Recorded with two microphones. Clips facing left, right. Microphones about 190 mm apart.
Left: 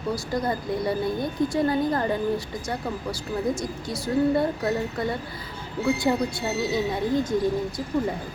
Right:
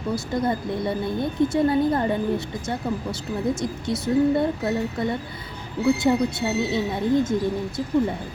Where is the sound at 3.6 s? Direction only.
20° right (ahead or behind).